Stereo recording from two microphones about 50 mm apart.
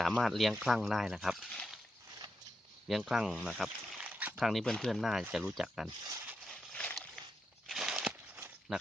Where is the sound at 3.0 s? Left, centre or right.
Centre.